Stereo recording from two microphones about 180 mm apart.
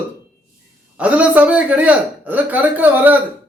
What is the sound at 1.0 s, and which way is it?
A man's voice, 10° right (ahead or behind).